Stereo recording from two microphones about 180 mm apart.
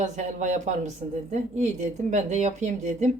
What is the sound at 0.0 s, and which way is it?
A woman's voice, 40° right (ahead or behind).